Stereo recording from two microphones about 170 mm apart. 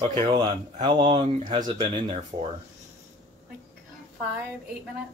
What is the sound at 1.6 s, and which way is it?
Speech, 30° right (ahead or behind).